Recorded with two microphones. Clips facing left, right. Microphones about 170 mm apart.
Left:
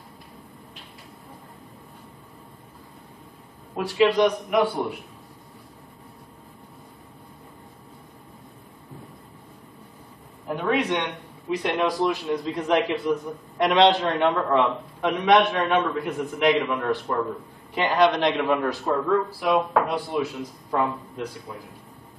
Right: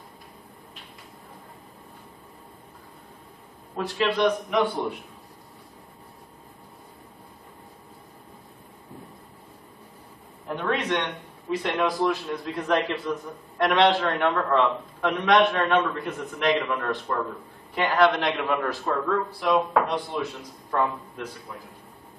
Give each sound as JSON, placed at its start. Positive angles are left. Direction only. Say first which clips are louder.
{"t": 4.0, "sound": "a man's voice", "louder": "left 4 dB", "side_deg": 5}
{"t": 10.4, "sound": "a sound", "louder": "left 3 dB", "side_deg": 5}
{"t": 12.1, "sound": "a man's voice", "louder": "left 3 dB", "side_deg": 0}
{"t": 12.6, "sound": "a man's voice", "louder": "left 3 dB", "side_deg": 15}
{"t": 17.7, "sound": "a man's voice", "louder": "left 1 dB", "side_deg": 20}